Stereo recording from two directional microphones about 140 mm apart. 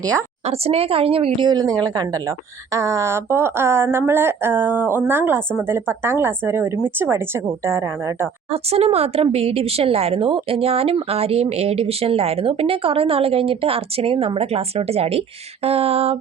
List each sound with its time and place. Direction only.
0.4 s a woman's voice: 45° right (ahead or behind); by 1.7 s 30° right (ahead or behind)
2.7 s a woman's voice: 20° right (ahead or behind)
8.7 s a woman's voice: 45° right (ahead or behind)